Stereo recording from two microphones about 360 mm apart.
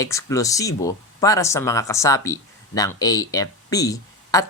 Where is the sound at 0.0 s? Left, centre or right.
Centre.